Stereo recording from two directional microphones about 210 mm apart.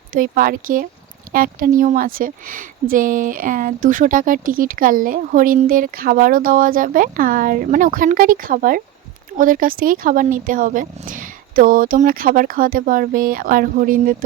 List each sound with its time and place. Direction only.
0.1 s speech: 45° right (ahead or behind)